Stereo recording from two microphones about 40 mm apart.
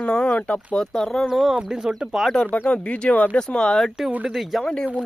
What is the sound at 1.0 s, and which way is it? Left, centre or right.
Speech, centre.